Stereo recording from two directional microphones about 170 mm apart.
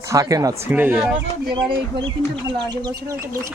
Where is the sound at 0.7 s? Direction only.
10° right (ahead or behind).